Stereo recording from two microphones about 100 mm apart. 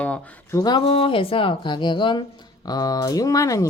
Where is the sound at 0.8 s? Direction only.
70° left (ahead or behind); by 2.2 s 50° left (ahead or behind).